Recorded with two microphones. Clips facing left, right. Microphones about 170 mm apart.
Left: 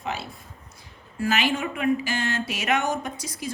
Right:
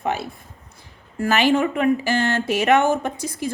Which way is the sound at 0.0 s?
55° right (ahead or behind).